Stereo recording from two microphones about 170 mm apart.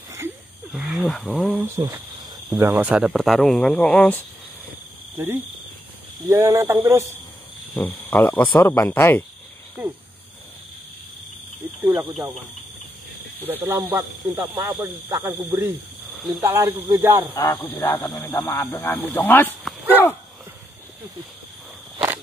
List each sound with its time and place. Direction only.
0.1 s a sound: 15° right (ahead or behind)
0.7 s speech: centre (ahead or behind)
1.8 s speech: 10° right (ahead or behind); by 4.2 s 10° left (ahead or behind)
5.1 s speech: 15° right (ahead or behind)
7.7 s speech: 10° left (ahead or behind)
9.8 s speech: 10° right (ahead or behind)
11.9 s speech: 5° right (ahead or behind)
13.4 s speech: 10° right (ahead or behind)
16.2 s speech: centre (ahead or behind)
16.4 s speech: 20° right (ahead or behind)
17.4 s speech: 15° left (ahead or behind)